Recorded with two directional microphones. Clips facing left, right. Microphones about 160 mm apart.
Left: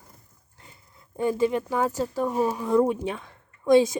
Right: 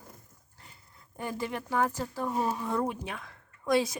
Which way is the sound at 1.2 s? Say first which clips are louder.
Left 11 dB; 20° left (ahead or behind).